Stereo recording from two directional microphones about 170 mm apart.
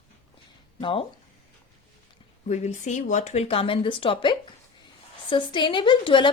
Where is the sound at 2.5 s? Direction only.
45° left (ahead or behind).